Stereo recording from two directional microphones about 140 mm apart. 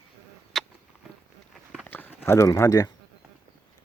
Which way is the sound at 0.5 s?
Centre (ahead or behind).